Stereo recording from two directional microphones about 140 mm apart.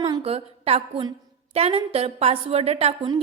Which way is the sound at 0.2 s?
45° right (ahead or behind).